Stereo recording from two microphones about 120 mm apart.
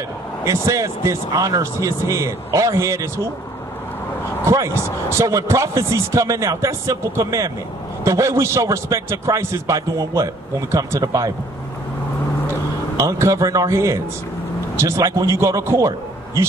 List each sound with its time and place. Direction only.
0.5 s a man's voice: 25° right (ahead or behind)
4.5 s a man's voice: 25° right (ahead or behind)
12.9 s a man's voice: 25° right (ahead or behind)